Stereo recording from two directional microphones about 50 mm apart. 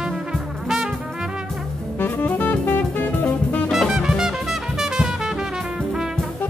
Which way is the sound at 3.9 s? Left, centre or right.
Centre.